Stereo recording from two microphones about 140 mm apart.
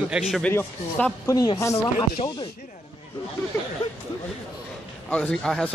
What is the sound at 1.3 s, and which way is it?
Speech, 25° left (ahead or behind).